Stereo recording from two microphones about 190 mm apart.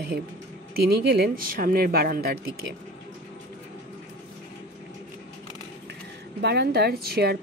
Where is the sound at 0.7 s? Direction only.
55° right (ahead or behind).